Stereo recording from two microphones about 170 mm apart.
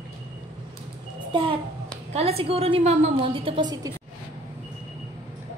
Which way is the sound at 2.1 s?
35° right (ahead or behind).